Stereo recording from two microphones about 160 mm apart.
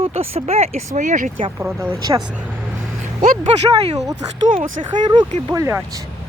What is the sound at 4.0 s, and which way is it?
Speech, 20° right (ahead or behind).